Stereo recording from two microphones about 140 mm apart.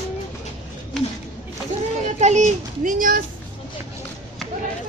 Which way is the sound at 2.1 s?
55° right (ahead or behind).